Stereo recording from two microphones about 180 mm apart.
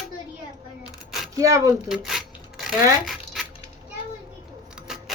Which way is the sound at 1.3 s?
20° right (ahead or behind).